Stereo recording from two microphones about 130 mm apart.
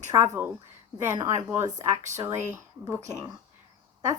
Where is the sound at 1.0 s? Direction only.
30° right (ahead or behind).